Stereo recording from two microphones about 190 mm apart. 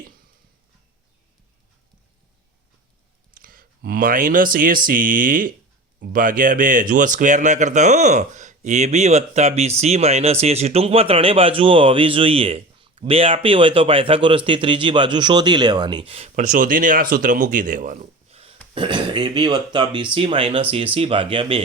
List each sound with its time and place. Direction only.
3.3 s speech: 50° right (ahead or behind); by 21.6 s 30° right (ahead or behind)